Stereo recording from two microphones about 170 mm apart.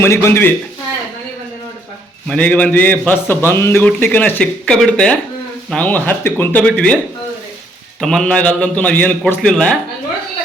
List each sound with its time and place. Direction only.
0.0 s a man's voice: 15° left (ahead or behind)
2.2 s a man's voice: 5° left (ahead or behind)
8.0 s a man's voice: 5° left (ahead or behind)